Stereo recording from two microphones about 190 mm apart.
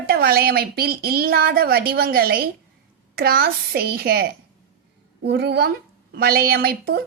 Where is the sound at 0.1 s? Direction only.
55° right (ahead or behind).